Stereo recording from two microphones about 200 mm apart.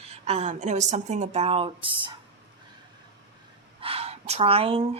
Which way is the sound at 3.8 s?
30° right (ahead or behind).